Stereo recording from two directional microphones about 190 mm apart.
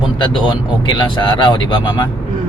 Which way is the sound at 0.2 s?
25° left (ahead or behind).